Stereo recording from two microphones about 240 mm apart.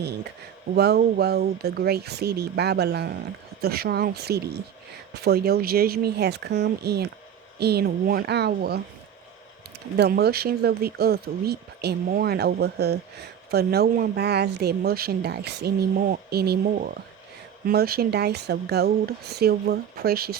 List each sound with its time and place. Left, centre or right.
0.8 s speech: right
10.0 s speech: right